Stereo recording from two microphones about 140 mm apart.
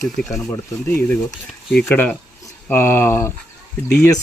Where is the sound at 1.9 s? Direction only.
15° left (ahead or behind).